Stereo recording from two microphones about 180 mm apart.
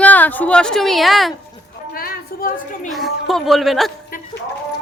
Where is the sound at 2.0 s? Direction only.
55° left (ahead or behind).